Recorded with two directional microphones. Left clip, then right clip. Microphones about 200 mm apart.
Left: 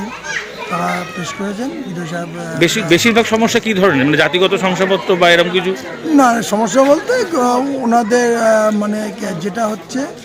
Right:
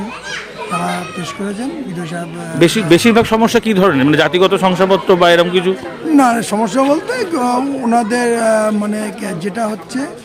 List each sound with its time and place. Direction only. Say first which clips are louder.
2.6 s speech: right 2 dB; 25° right (ahead or behind)
6.1 s speech: even; centre (ahead or behind)